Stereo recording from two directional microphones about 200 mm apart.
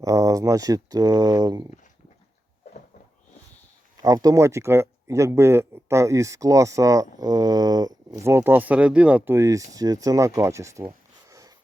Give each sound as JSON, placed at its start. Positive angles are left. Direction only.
{"t": 0.0, "sound": "speech", "side_deg": -15}
{"t": 4.0, "sound": "speech", "side_deg": -15}